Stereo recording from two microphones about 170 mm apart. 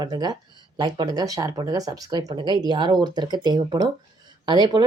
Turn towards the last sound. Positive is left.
turn(degrees=-25)  # may be behind; listen again after turning